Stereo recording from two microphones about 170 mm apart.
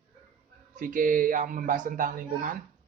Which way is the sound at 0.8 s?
50° right (ahead or behind).